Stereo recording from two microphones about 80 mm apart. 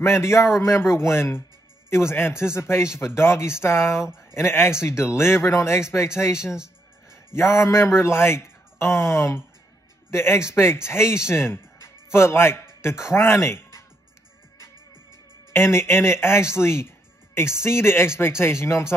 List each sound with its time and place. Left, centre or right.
0.0 s speech: left
7.3 s speech: left
13.5 s music: left
15.5 s speech: left